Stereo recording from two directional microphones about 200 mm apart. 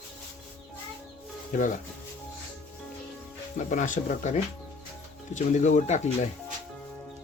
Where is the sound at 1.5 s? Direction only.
40° left (ahead or behind).